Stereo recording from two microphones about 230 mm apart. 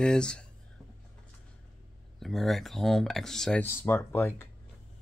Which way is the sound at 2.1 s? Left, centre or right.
Centre.